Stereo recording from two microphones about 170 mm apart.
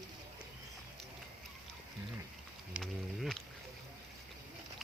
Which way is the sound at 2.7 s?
Centre (ahead or behind).